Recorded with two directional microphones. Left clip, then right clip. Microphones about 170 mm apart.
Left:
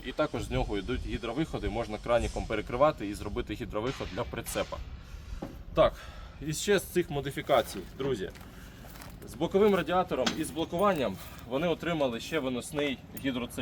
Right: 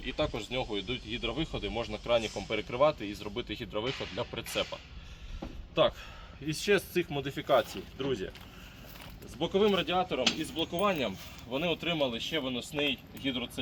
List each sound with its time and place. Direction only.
0.0 s speech: 5° left (ahead or behind)
3.8 s speech: 15° right (ahead or behind)
4.2 s speech: centre (ahead or behind)
4.4 s speech: 15° right (ahead or behind)
6.4 s speech: 30° right (ahead or behind)
9.4 s speech: 5° right (ahead or behind)